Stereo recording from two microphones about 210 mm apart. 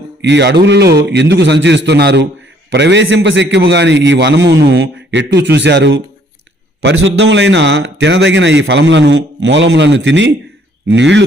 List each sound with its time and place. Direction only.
0.2 s a man's voice: 55° right (ahead or behind)